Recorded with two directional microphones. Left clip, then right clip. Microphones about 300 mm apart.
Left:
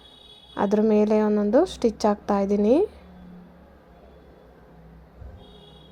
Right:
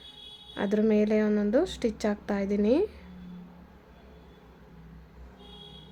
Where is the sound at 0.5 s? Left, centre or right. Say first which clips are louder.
Left 5 dB; centre.